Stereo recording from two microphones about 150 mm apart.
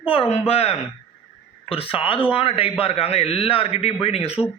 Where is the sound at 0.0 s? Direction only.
40° left (ahead or behind).